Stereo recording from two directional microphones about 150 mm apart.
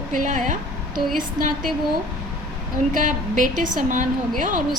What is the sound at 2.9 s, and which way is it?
A woman's voice, 60° right (ahead or behind).